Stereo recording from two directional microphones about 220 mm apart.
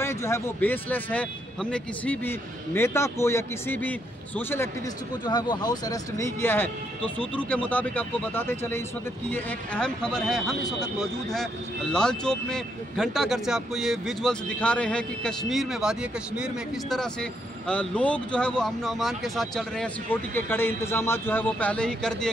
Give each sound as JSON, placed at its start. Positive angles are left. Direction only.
{"t": 0.0, "sound": "speech", "side_deg": 15}
{"t": 11.9, "sound": "speech", "side_deg": 5}